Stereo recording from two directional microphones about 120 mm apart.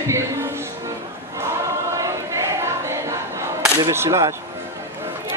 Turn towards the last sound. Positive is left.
turn(degrees=-25)  # may be behind; listen again after turning